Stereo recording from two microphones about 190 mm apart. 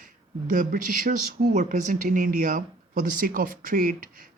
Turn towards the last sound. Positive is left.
turn(degrees=-45)  # may be behind; listen again after turning